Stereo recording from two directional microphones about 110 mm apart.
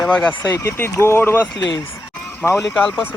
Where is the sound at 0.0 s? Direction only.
5° left (ahead or behind).